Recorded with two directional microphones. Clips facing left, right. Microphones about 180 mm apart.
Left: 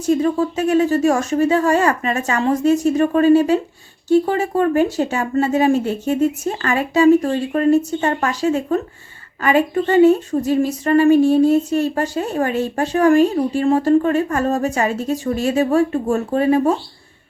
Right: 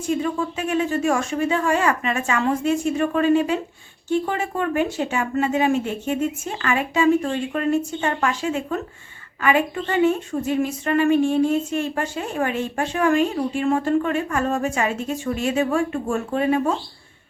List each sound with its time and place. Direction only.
0.0 s a woman's voice: 40° left (ahead or behind)